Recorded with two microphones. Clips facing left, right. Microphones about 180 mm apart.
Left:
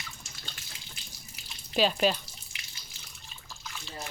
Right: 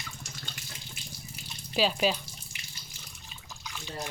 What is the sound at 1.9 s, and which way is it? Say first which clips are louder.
Speech: left 1 dB; centre (ahead or behind).